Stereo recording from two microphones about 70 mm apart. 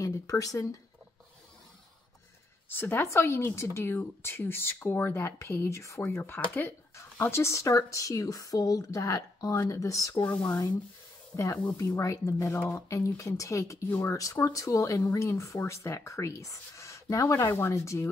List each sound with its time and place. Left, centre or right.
0.0 s speech: left
2.7 s speech: left
6.0 s speech: left
7.2 s speech: left
10.2 s speech: centre
11.3 s speech: left